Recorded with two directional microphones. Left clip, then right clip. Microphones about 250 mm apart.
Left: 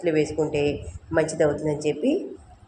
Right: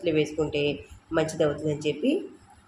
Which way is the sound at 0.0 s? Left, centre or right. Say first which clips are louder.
Left 3 dB; centre.